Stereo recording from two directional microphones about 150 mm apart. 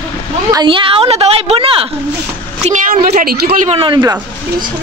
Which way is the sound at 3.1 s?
70° right (ahead or behind).